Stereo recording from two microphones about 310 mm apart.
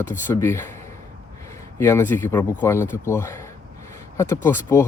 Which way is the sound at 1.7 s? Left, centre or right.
Centre.